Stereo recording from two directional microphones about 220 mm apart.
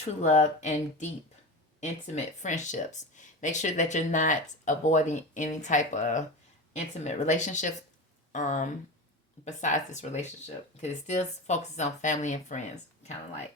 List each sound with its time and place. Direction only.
0.2 s speech: 30° left (ahead or behind)